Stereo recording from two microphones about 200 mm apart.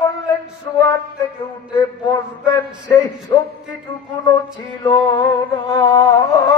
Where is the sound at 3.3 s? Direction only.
20° left (ahead or behind).